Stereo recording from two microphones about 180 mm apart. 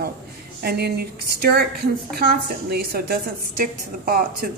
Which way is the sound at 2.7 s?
60° right (ahead or behind).